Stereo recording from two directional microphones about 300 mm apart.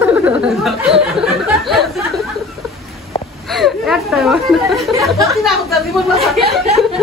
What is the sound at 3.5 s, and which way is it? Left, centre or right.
Speech, centre.